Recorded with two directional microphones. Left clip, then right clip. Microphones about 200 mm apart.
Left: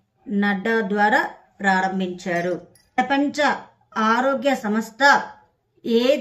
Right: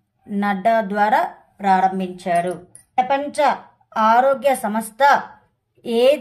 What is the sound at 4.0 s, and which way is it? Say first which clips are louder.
A woman's voice: right 5 dB; 40° right (ahead or behind).